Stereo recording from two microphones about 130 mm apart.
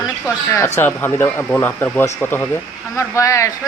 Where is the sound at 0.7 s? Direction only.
15° left (ahead or behind).